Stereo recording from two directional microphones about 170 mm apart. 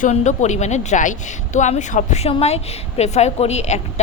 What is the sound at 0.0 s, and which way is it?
A woman's voice, 45° left (ahead or behind).